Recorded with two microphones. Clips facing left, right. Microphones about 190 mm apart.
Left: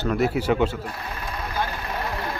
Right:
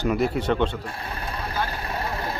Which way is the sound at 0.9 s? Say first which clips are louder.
Even; 30° right (ahead or behind).